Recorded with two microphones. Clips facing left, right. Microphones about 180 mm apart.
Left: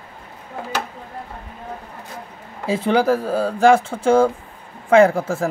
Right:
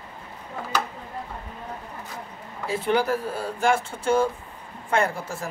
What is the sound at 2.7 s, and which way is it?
Speech, 90° left.